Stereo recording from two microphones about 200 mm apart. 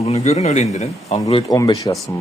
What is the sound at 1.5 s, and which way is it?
Speech, 15° left (ahead or behind).